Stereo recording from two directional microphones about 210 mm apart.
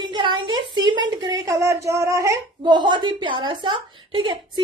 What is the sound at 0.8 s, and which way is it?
A woman's voice, 20° right (ahead or behind).